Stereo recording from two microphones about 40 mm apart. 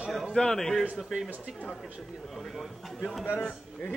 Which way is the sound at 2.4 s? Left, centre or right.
Centre.